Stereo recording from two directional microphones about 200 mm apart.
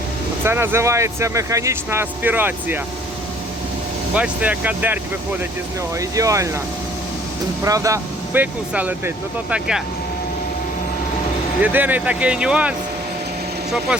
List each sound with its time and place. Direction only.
0.4 s speech: 10° right (ahead or behind)
4.1 s speech: 5° right (ahead or behind)
7.6 s speech: 15° right (ahead or behind)
11.6 s speech: 10° right (ahead or behind)